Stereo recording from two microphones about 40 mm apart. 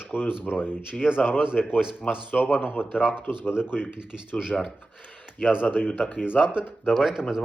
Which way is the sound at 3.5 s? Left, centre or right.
Left.